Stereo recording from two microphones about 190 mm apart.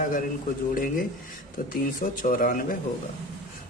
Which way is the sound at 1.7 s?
45° left (ahead or behind).